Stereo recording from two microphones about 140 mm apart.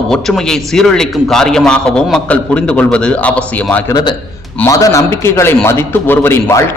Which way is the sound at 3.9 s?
35° left (ahead or behind).